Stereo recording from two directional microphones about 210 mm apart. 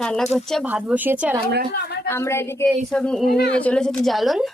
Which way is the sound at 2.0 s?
10° left (ahead or behind).